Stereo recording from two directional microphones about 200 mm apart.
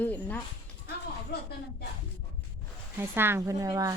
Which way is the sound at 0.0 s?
10° left (ahead or behind).